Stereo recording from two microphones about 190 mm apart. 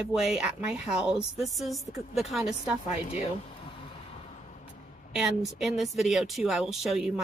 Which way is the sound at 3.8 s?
30° left (ahead or behind).